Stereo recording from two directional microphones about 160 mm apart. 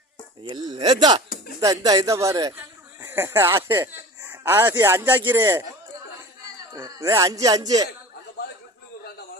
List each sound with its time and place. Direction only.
0.5 s speech: 25° right (ahead or behind)
6.7 s speech: 20° right (ahead or behind)